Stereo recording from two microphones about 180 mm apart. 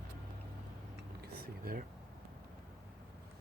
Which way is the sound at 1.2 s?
60° right (ahead or behind).